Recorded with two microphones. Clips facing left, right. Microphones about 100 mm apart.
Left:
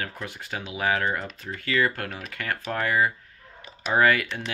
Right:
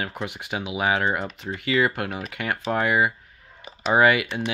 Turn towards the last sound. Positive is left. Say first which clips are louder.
# right 3 dB
turn(degrees=-15)  # may be behind; listen again after turning